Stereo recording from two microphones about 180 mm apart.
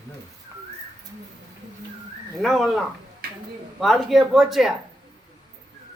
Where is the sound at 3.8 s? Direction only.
Centre (ahead or behind).